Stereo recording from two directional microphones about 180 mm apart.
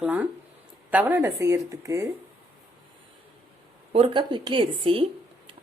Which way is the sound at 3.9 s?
30° right (ahead or behind).